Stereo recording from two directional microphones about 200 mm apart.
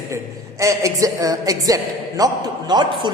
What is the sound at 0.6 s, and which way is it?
A woman's voice, 15° right (ahead or behind).